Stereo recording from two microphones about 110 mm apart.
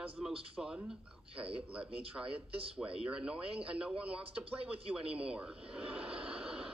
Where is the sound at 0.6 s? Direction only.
5° right (ahead or behind).